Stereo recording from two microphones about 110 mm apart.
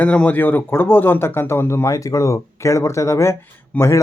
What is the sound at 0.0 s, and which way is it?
Speech, 15° left (ahead or behind).